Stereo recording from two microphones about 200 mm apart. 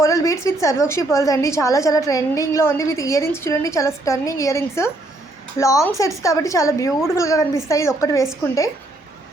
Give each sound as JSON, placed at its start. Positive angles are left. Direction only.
{"t": 0.0, "sound": "a woman's voice", "side_deg": 15}